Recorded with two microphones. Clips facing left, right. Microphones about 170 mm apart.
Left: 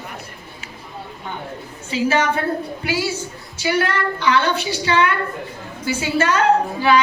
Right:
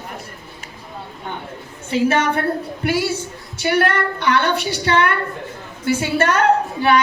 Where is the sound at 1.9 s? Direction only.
60° right (ahead or behind).